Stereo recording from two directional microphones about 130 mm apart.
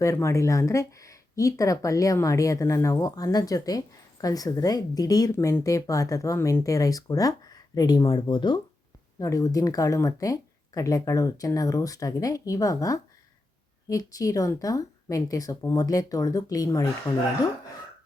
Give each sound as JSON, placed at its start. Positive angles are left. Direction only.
{"t": 0.0, "sound": "speech", "side_deg": 25}
{"t": 9.1, "sound": "speech", "side_deg": 25}